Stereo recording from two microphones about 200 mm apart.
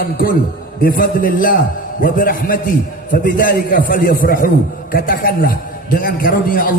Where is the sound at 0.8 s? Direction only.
45° left (ahead or behind).